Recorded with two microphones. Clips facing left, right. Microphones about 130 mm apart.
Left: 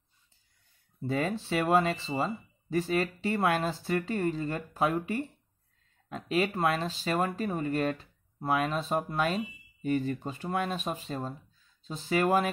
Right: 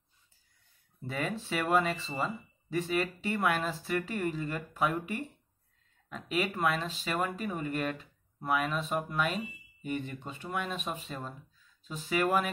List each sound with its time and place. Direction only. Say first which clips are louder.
1.0 s speech: left 5 dB; 30° left (ahead or behind)